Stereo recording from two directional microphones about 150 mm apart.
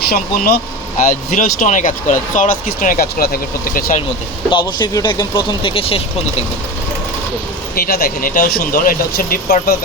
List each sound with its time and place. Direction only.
0.1 s speech: 90° left
1.4 s speech: 55° left (ahead or behind); by 3.8 s 75° left (ahead or behind)
4.4 s speech: 30° left (ahead or behind)
7.8 s speech: 90° left